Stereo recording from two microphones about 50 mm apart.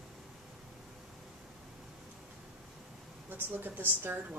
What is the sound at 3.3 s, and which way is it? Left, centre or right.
Speech, right.